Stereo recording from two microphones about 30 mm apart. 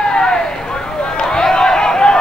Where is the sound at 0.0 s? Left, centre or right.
Left.